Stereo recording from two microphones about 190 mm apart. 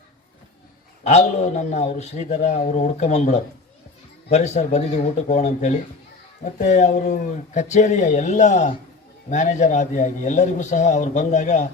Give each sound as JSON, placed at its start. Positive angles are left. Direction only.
{"t": 1.0, "sound": "a man's voice", "side_deg": 35}